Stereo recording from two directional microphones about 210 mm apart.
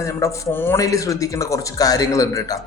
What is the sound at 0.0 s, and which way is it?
A man's voice, 10° left (ahead or behind).